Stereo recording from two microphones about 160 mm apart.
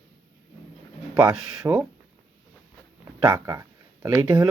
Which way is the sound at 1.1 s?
25° right (ahead or behind).